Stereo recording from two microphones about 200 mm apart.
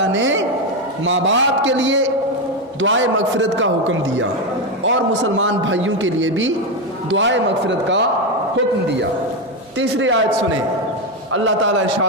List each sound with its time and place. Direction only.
0.0 s a sound: 70° right (ahead or behind)
1.0 s a man's voice: 70° right (ahead or behind)
9.7 s a man's voice: 70° right (ahead or behind)
11.3 s a man's voice: 70° right (ahead or behind)